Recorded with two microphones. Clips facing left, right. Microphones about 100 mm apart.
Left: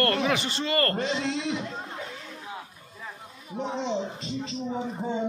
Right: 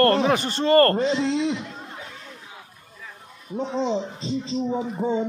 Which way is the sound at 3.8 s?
30° right (ahead or behind).